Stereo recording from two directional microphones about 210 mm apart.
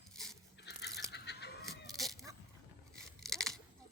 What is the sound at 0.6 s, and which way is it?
Toothbrush, 50° left (ahead or behind).